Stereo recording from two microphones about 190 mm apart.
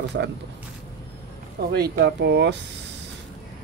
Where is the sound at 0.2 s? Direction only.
65° right (ahead or behind).